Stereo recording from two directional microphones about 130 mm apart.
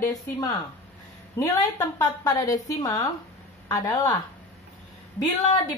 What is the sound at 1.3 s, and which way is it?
A woman's voice, 25° left (ahead or behind).